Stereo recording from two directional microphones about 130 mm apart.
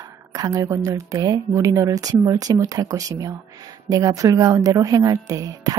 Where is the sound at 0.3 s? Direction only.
25° right (ahead or behind).